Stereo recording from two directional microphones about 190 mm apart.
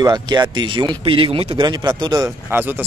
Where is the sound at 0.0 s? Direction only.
20° right (ahead or behind).